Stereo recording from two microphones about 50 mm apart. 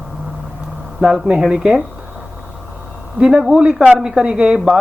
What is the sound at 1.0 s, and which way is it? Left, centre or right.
Speech, centre.